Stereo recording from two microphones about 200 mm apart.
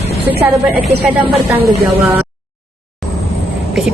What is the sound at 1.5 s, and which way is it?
Speech, 10° right (ahead or behind).